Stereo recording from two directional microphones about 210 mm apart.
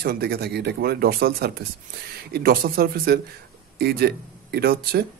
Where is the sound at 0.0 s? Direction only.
50° right (ahead or behind).